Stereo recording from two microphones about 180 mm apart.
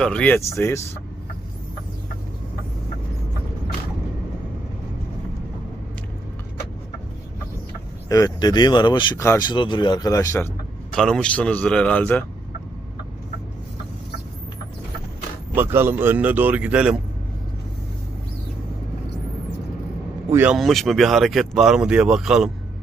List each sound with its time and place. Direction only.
0.0 s speech: 5° left (ahead or behind)
8.1 s speech: 20° left (ahead or behind)
10.9 s speech: 5° left (ahead or behind)
15.5 s speech: 10° right (ahead or behind)
20.3 s speech: 5° right (ahead or behind)